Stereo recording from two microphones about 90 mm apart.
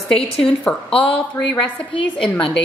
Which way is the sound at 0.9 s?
80° left.